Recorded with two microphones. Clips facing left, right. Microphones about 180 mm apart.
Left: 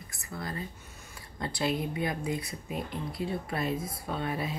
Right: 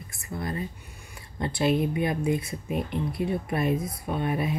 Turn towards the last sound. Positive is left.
turn(degrees=-20)  # may be behind; listen again after turning